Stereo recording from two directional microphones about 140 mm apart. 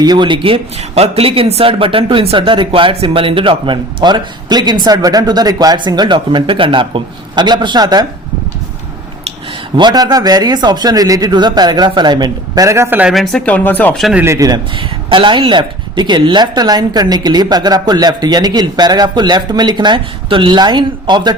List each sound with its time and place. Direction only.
0.0 s speech: 30° right (ahead or behind)
9.7 s speech: 30° right (ahead or behind); by 13.1 s 10° right (ahead or behind)
13.1 s speech: 5° left (ahead or behind)
13.9 s speech: centre (ahead or behind)
14.2 s speech: 20° right (ahead or behind)